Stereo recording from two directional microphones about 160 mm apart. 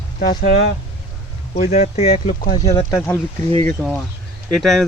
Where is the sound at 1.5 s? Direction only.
45° left (ahead or behind).